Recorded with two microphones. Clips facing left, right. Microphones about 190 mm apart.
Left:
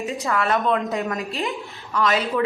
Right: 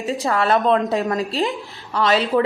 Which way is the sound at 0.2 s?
30° right (ahead or behind).